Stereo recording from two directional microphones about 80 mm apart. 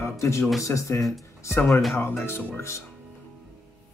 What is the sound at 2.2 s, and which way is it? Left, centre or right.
Speech, left.